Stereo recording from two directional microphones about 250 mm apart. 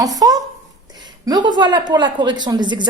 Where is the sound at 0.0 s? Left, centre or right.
Centre.